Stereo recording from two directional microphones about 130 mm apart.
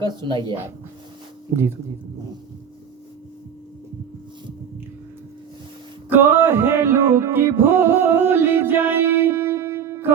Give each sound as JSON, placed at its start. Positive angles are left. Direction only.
{"t": 0.0, "sound": "speech", "side_deg": -35}
{"t": 6.1, "sound": "music", "side_deg": -15}